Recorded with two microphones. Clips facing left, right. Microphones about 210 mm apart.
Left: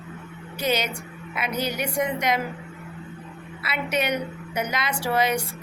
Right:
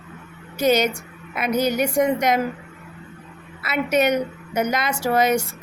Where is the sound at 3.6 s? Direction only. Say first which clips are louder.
Right 6 dB; 45° right (ahead or behind).